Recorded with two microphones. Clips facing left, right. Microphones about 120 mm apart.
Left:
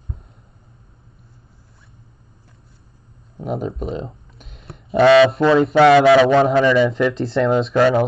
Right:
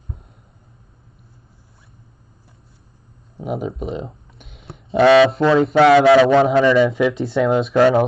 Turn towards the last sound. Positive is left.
turn(degrees=-5)  # may be behind; listen again after turning